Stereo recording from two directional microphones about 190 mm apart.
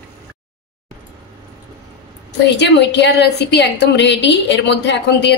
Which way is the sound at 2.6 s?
65° left (ahead or behind).